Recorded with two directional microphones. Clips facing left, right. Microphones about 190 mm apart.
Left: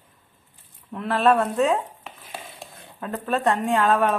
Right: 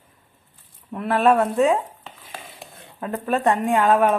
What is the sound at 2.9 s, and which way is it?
Speech, 5° right (ahead or behind).